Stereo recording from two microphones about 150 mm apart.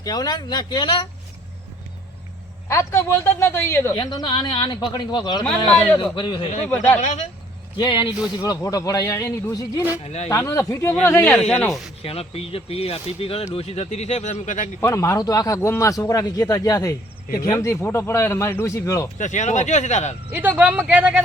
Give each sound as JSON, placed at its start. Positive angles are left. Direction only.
{"t": 0.0, "sound": "a man's voice", "side_deg": 25}
{"t": 2.6, "sound": "a man's voice", "side_deg": 15}
{"t": 3.9, "sound": "a man's voice", "side_deg": 30}
{"t": 5.5, "sound": "a man's voice", "side_deg": 10}
{"t": 6.1, "sound": "speech", "side_deg": 30}
{"t": 6.7, "sound": "a man's voice", "side_deg": 10}
{"t": 7.8, "sound": "a man's voice", "side_deg": 30}
{"t": 10.0, "sound": "speech", "side_deg": 45}
{"t": 10.2, "sound": "a man's voice", "side_deg": 20}
{"t": 12.0, "sound": "speech", "side_deg": 40}
{"t": 14.8, "sound": "a man's voice", "side_deg": 15}
{"t": 19.2, "sound": "speech", "side_deg": 55}
{"t": 20.3, "sound": "speech", "side_deg": -10}